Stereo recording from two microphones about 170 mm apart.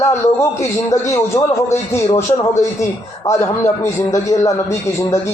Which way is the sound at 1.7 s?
15° left (ahead or behind).